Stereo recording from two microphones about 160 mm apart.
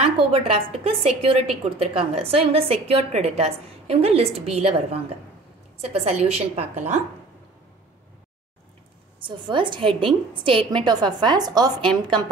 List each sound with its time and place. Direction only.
0.0 s a woman's voice: 40° right (ahead or behind)
9.2 s a woman's voice: 30° right (ahead or behind)